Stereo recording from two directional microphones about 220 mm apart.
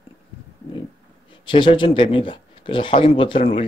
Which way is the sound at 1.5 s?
20° left (ahead or behind).